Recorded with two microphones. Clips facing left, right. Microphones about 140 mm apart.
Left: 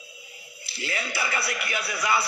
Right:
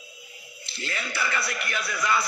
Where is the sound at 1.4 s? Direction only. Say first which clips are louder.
Left 1 dB; 10° left (ahead or behind).